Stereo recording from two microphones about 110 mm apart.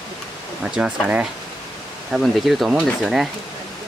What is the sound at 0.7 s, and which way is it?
Speech, 10° right (ahead or behind).